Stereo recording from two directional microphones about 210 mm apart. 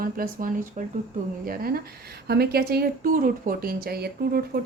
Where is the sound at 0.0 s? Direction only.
40° right (ahead or behind).